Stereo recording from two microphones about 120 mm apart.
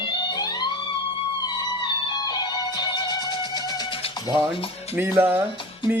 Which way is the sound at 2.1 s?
35° left (ahead or behind).